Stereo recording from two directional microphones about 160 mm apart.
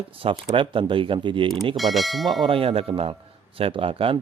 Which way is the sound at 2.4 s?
35° right (ahead or behind).